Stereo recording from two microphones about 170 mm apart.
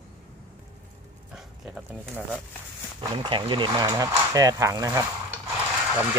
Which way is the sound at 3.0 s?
30° right (ahead or behind).